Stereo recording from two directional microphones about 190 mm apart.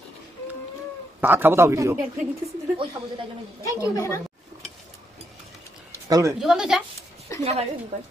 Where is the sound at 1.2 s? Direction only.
10° right (ahead or behind).